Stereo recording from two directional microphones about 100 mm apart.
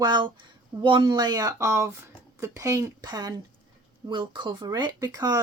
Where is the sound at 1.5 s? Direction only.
30° right (ahead or behind).